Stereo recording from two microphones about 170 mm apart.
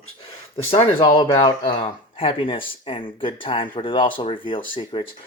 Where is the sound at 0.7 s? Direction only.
30° left (ahead or behind).